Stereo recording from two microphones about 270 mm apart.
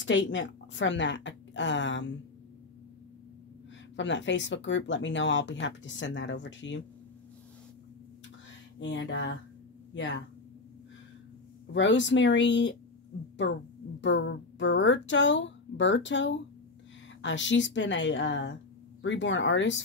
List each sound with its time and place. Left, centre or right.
0.0 s a woman's voice: left
3.9 s speech: left
8.7 s a woman's voice: left
11.7 s speech: left
14.0 s speech: left